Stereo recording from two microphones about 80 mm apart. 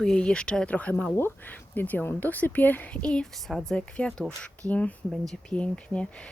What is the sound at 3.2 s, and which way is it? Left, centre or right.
Speech, centre.